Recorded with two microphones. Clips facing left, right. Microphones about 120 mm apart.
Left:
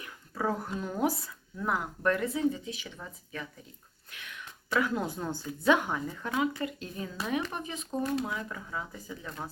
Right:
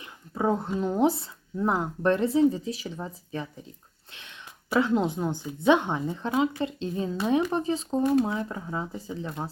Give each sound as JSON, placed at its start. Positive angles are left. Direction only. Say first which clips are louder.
{"t": 0.0, "sound": "speech", "louder": "right 5 dB", "side_deg": -25}
{"t": 4.1, "sound": "whispering", "louder": "left 1 dB", "side_deg": -25}
{"t": 4.8, "sound": "speech", "louder": "right 7 dB", "side_deg": -20}